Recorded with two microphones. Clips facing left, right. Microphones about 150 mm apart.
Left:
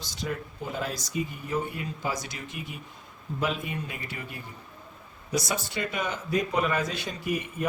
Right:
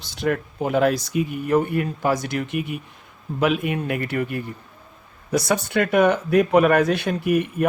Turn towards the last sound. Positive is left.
turn(degrees=-60)  # may be behind; listen again after turning